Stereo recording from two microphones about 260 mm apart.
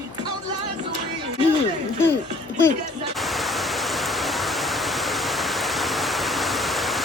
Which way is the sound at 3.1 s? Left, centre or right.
Centre.